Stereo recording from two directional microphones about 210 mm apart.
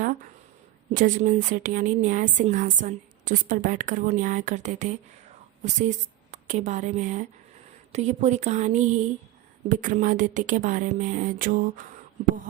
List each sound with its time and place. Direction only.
0.9 s a woman's voice: 40° right (ahead or behind)